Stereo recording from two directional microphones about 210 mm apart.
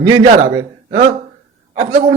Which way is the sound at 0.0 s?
15° right (ahead or behind).